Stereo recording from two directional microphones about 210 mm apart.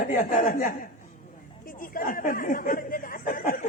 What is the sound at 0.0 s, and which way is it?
Speech, 40° left (ahead or behind).